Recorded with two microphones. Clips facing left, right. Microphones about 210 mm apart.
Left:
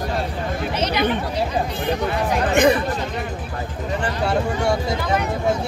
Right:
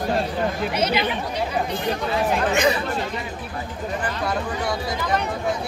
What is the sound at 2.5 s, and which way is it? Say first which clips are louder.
Speech: left 8 dB; 55° left (ahead or behind).